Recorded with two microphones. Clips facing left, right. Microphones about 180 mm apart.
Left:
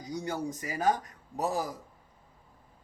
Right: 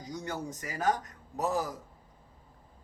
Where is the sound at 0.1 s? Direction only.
10° left (ahead or behind).